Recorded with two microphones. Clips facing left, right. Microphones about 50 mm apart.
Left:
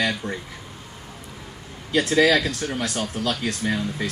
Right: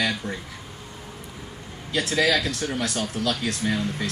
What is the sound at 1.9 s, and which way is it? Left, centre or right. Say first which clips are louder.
Speech: left 4 dB; centre.